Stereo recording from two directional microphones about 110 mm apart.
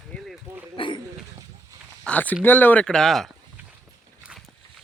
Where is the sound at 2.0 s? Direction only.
15° left (ahead or behind).